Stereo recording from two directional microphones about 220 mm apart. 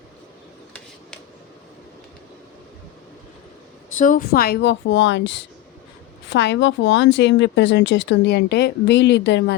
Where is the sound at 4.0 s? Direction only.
40° left (ahead or behind).